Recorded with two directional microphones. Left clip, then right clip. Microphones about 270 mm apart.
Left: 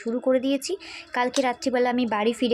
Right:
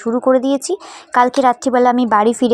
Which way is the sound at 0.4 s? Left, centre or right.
Centre.